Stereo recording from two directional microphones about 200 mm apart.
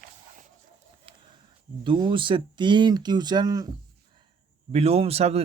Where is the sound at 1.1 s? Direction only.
30° right (ahead or behind).